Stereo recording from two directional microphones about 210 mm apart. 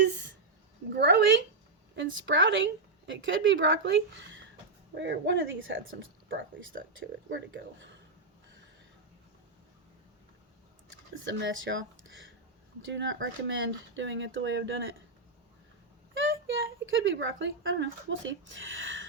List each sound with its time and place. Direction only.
0.9 s speech: 55° right (ahead or behind)
10.8 s a sound: 65° right (ahead or behind)
12.8 s speech: 60° right (ahead or behind)
16.1 s speech: 65° right (ahead or behind)